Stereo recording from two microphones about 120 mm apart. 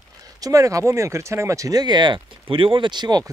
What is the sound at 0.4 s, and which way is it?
Speech, 25° right (ahead or behind).